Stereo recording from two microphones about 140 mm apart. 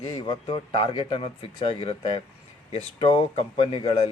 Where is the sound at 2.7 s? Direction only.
40° left (ahead or behind).